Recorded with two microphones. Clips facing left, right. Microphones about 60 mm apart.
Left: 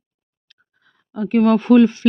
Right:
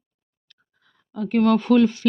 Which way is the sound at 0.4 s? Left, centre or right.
Left.